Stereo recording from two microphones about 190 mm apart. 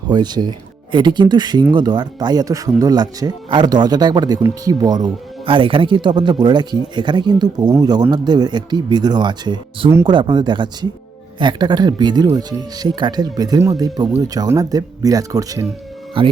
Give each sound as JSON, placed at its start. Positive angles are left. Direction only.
{"t": 0.1, "sound": "speech", "side_deg": -20}